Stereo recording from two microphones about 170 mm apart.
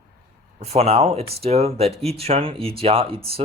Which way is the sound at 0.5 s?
40° right (ahead or behind).